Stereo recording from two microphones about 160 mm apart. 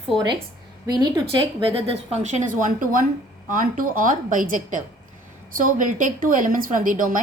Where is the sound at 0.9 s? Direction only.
25° right (ahead or behind).